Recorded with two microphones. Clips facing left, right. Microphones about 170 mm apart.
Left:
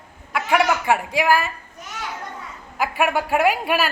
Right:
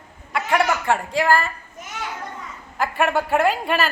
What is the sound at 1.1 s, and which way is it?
Speech, 5° left (ahead or behind).